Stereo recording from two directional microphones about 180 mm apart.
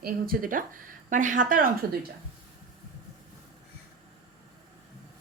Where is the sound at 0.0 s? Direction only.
50° right (ahead or behind).